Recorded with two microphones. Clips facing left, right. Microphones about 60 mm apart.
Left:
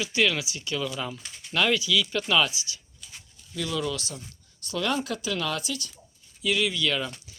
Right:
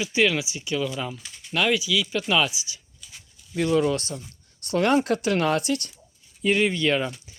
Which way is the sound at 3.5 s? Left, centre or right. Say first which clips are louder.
Right 8 dB; right.